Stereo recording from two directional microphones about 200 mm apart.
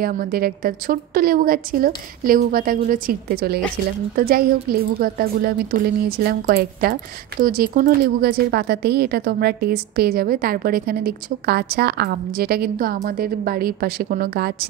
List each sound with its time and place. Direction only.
0.0 s speech: 45° right (ahead or behind)